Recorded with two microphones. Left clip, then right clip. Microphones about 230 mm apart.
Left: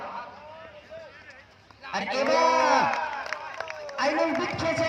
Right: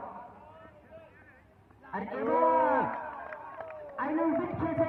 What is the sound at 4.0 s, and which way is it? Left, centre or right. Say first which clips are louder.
Speech: left 5 dB; left.